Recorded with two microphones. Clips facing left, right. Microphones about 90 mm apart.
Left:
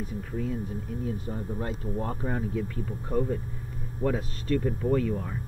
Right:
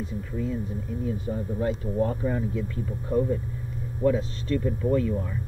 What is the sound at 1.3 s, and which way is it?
Speech, 45° left (ahead or behind).